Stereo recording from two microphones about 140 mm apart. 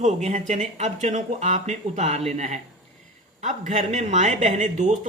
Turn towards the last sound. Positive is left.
turn(degrees=-60)  # may be behind; listen again after turning